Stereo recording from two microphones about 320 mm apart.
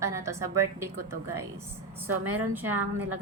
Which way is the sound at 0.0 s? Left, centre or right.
Centre.